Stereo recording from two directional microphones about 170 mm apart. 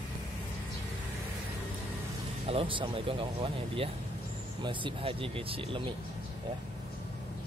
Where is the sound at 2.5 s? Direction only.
30° right (ahead or behind).